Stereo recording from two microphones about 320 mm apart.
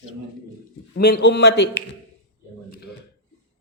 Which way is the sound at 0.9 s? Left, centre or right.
Left.